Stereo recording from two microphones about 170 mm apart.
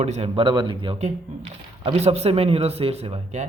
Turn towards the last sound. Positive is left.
turn(degrees=-40)  # may be behind; listen again after turning